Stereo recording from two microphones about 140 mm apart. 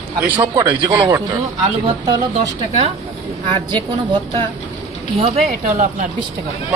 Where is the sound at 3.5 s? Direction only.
40° right (ahead or behind).